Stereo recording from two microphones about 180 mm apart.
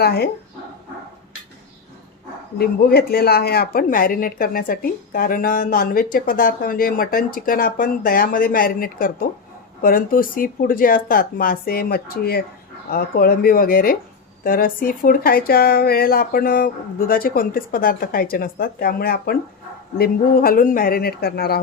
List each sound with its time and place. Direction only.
0.0 s speech: 60° left (ahead or behind)
2.6 s speech: 60° left (ahead or behind)